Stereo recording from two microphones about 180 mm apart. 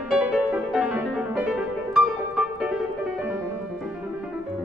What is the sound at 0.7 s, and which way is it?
Music, 5° right (ahead or behind).